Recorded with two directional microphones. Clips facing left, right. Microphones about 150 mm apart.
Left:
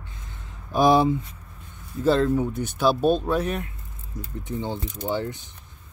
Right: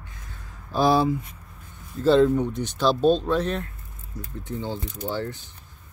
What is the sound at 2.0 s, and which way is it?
Speech, centre (ahead or behind).